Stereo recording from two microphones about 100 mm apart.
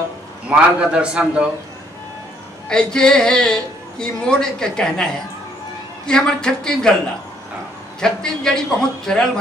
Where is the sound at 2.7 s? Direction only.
10° left (ahead or behind).